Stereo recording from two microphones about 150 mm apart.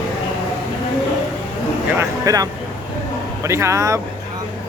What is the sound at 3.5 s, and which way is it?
Speech, 20° right (ahead or behind).